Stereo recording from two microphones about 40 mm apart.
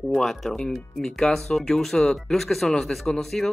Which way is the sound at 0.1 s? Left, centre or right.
Centre.